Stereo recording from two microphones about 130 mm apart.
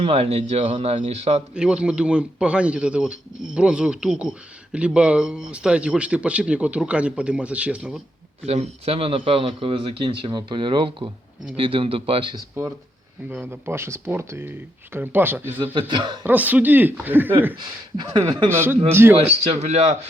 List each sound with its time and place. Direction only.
0.0 s a man's voice: 50° right (ahead or behind)
1.5 s speech: 5° right (ahead or behind)
8.4 s a man's voice: 55° right (ahead or behind)
12.3 s speech: 25° right (ahead or behind)
13.2 s speech: 15° right (ahead or behind)
15.9 s speech: 35° right (ahead or behind)
16.2 s speech: 15° right (ahead or behind)
17.9 s speech: 35° right (ahead or behind)
18.4 s speech: 20° right (ahead or behind)
19.1 s a man's voice: 50° right (ahead or behind)